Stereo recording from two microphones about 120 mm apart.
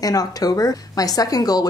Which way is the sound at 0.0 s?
30° left (ahead or behind).